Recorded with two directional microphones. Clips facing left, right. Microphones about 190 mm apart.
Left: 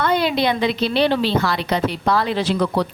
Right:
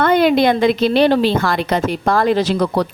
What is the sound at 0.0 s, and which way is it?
A woman's voice, 55° right (ahead or behind).